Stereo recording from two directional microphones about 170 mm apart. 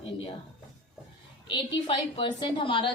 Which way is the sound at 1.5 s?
30° left (ahead or behind).